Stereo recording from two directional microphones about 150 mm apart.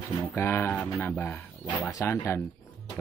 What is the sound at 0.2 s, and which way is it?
Speech, 15° left (ahead or behind).